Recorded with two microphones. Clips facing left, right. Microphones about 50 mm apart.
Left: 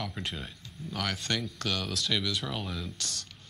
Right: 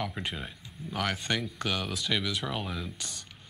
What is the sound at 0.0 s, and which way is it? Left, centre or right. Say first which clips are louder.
Speech: right 2 dB; centre.